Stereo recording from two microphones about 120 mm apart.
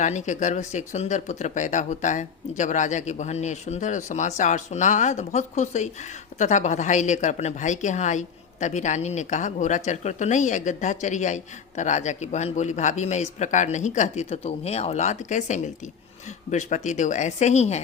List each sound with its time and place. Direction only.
0.0 s speech: 90° left; by 17.7 s 70° left (ahead or behind)